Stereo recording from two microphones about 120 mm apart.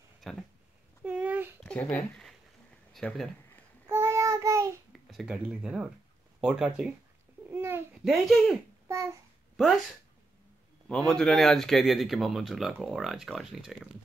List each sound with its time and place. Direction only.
0.2 s speech: centre (ahead or behind)
1.0 s a sound: 15° right (ahead or behind)
1.6 s a sound: 10° left (ahead or behind)
2.9 s speech: 5° left (ahead or behind)
3.9 s child singing: 20° right (ahead or behind)
5.1 s speech: 5° right (ahead or behind)
7.4 s babbling: 20° right (ahead or behind)
8.0 s speech: centre (ahead or behind)
8.8 s a child's voice: 25° right (ahead or behind)
10.9 s speech: 5° left (ahead or behind)